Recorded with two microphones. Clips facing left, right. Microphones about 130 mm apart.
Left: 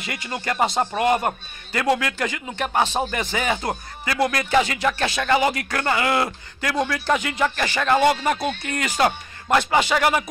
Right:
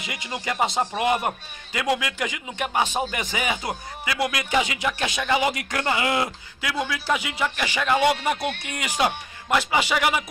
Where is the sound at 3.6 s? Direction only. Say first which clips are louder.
Left 3 dB; 45° left (ahead or behind).